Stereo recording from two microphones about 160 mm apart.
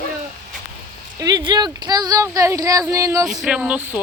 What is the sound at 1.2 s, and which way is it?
Speech, 25° right (ahead or behind).